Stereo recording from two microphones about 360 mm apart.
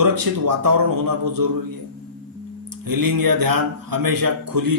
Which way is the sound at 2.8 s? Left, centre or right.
Right.